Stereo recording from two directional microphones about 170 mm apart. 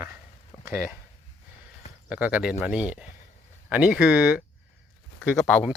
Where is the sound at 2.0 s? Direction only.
10° right (ahead or behind).